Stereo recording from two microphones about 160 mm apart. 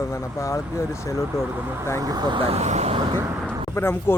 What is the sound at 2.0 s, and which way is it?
Speech, 25° right (ahead or behind).